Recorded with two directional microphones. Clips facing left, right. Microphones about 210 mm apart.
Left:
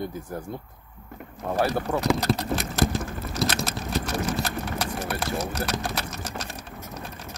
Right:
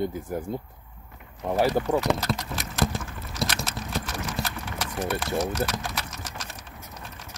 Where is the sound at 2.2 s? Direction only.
35° left (ahead or behind).